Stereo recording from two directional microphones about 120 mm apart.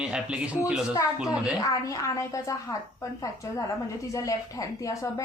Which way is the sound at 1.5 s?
30° left (ahead or behind).